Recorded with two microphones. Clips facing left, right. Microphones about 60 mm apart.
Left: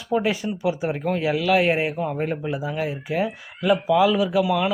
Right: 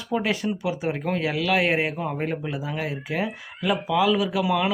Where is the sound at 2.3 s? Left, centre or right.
Centre.